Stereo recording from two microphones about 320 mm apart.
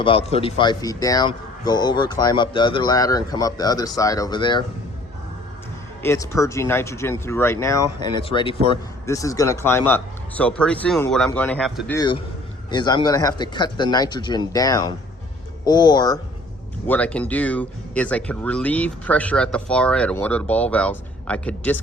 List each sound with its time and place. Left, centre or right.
0.0 s speech: centre
6.0 s speech: centre
11.9 s speech: centre